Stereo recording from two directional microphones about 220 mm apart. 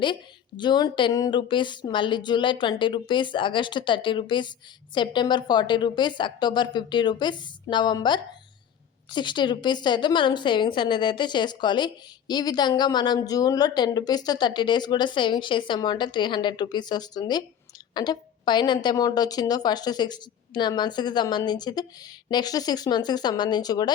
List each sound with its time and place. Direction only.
0.0 s a woman's voice: 20° left (ahead or behind)